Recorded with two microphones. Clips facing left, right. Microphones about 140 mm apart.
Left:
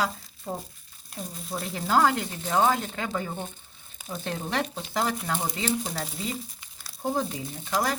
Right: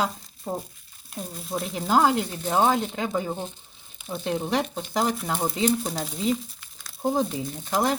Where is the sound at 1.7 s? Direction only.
15° right (ahead or behind).